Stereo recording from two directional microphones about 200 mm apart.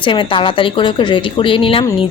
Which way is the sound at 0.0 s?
25° left (ahead or behind).